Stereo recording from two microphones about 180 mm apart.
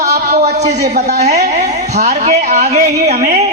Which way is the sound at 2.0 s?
45° right (ahead or behind).